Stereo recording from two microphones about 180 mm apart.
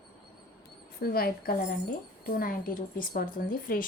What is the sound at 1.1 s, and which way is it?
A woman's voice, 55° left (ahead or behind).